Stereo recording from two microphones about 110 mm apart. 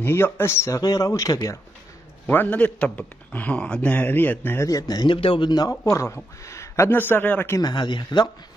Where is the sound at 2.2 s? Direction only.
15° left (ahead or behind).